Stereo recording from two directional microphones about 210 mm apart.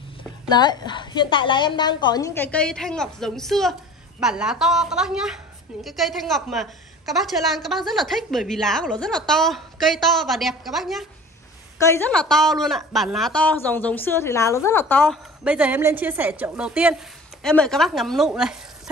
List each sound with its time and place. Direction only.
0.5 s a woman's voice: 20° left (ahead or behind)
15.4 s a woman's voice: 5° right (ahead or behind)